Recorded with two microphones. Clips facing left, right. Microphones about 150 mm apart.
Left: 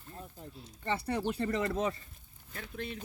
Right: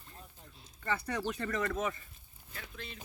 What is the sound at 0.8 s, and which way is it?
Speech, 30° left (ahead or behind).